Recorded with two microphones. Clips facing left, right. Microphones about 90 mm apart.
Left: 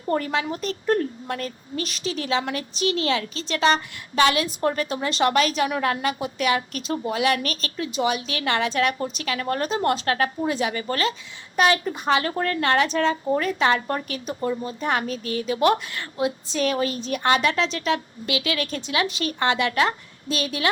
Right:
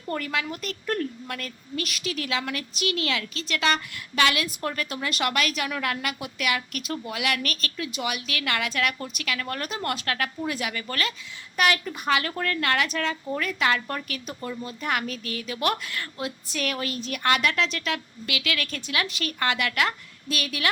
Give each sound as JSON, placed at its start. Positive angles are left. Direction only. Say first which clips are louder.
{"t": 0.1, "sound": "a woman's voice", "louder": "left 5 dB", "side_deg": 25}